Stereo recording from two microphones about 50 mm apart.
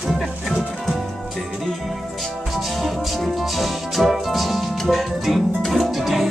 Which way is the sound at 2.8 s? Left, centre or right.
Centre.